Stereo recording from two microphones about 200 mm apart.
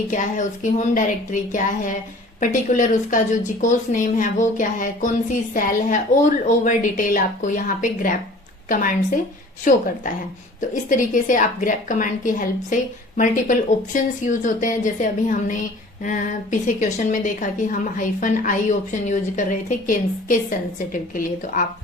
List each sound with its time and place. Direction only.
0.1 s a woman's voice: 40° left (ahead or behind)